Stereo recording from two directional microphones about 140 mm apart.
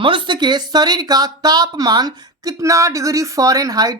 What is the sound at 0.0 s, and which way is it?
Speech, 35° right (ahead or behind).